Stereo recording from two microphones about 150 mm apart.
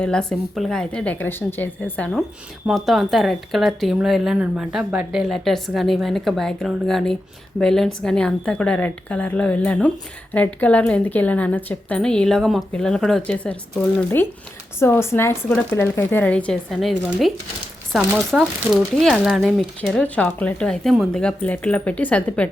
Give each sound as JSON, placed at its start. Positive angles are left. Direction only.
{"t": 0.0, "sound": "a woman's voice", "side_deg": 5}
{"t": 2.6, "sound": "a woman's voice", "side_deg": 0}
{"t": 14.8, "sound": "a woman's voice", "side_deg": 15}